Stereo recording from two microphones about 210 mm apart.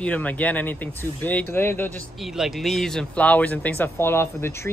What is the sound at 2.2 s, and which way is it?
Speech, centre (ahead or behind).